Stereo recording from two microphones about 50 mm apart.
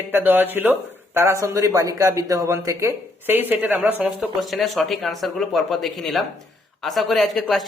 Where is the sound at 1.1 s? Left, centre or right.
Right.